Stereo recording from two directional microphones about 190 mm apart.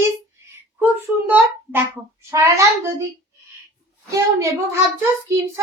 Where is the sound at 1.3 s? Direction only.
10° right (ahead or behind).